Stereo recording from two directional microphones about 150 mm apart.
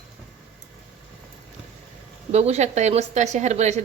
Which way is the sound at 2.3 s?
45° right (ahead or behind).